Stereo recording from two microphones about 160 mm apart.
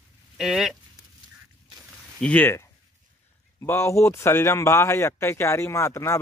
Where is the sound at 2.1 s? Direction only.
10° left (ahead or behind).